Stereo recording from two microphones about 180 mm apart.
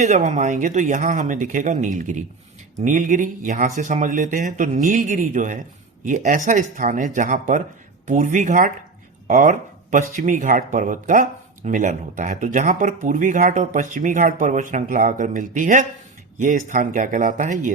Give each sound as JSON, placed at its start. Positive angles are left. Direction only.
{"t": 0.0, "sound": "speech", "side_deg": -40}